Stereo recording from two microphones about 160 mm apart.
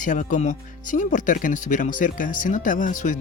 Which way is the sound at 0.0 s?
55° left (ahead or behind).